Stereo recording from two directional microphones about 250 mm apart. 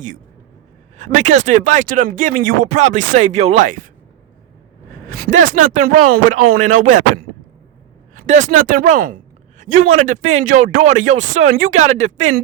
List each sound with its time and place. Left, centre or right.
0.9 s speech: right
5.0 s a woman's voice: right